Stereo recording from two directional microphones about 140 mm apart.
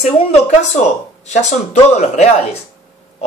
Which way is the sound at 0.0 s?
50° left (ahead or behind).